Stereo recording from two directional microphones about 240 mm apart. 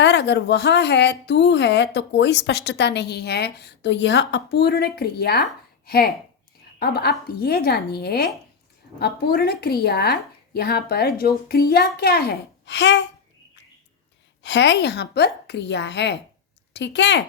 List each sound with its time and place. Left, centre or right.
0.0 s a woman's voice: left
14.4 s speech: left